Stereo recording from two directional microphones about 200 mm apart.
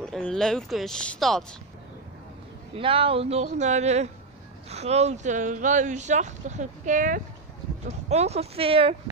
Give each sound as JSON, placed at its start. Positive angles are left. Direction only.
{"t": 0.0, "sound": "speech", "side_deg": 5}
{"t": 2.7, "sound": "speech", "side_deg": -25}